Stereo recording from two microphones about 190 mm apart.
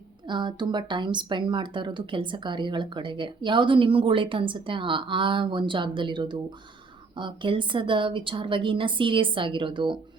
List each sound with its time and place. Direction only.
0.3 s speech: 25° right (ahead or behind)